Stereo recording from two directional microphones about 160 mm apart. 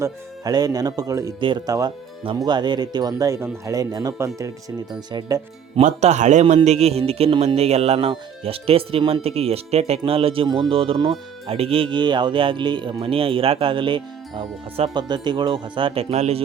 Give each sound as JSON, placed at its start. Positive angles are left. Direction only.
{"t": 0.0, "sound": "speech", "side_deg": -25}
{"t": 5.8, "sound": "a man's voice", "side_deg": -45}